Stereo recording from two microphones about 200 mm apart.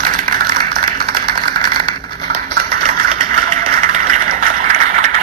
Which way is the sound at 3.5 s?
35° right (ahead or behind).